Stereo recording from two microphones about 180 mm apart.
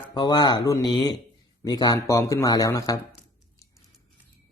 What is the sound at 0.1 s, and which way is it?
Speech, 25° left (ahead or behind).